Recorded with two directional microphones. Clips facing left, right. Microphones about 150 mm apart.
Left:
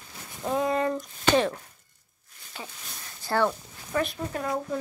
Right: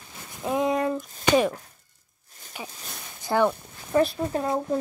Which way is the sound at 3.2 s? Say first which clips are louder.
Right 3 dB; 15° right (ahead or behind).